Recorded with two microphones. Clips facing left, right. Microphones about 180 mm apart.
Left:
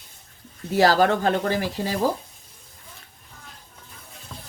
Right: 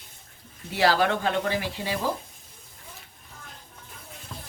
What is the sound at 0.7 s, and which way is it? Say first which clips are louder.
Speech: left 4 dB; 40° left (ahead or behind).